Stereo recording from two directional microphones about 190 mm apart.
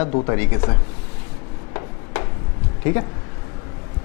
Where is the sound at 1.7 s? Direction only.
15° left (ahead or behind).